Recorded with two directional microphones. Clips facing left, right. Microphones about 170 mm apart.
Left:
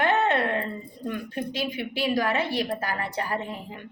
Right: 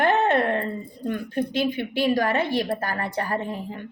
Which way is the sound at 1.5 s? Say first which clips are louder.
Right 6 dB; 55° right (ahead or behind).